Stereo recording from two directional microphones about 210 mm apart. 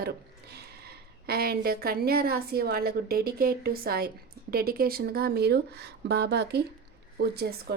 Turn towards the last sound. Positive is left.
turn(degrees=-50)  # may be behind; listen again after turning